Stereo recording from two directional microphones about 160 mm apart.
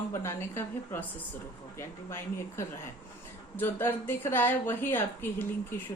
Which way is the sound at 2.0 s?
15° left (ahead or behind).